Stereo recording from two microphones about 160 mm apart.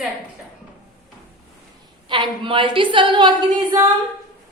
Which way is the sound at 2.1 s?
30° right (ahead or behind).